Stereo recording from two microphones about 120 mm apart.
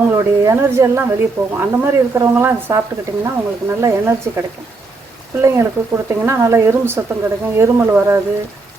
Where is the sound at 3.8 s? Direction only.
20° right (ahead or behind).